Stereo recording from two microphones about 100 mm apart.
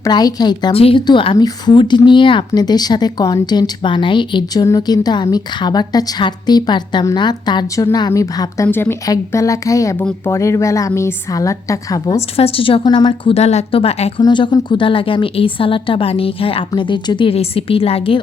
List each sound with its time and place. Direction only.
0.0 s a woman's voice: 40° left (ahead or behind)
0.7 s a woman's voice: 70° left (ahead or behind)
1.0 s a woman's voice: 55° left (ahead or behind)
1.5 s speech: 45° left (ahead or behind)
2.5 s speech: 45° left (ahead or behind)
4.6 s a woman's voice: 40° left (ahead or behind); by 9.0 s 20° left (ahead or behind)
9.0 s a woman's voice: 35° left (ahead or behind)
12.4 s a woman's voice: 70° left (ahead or behind)
12.9 s a woman's voice: 55° left (ahead or behind)
13.3 s a woman's voice: 90° left
14.2 s a woman's voice: 50° left (ahead or behind)
17.3 s a woman's voice: 80° left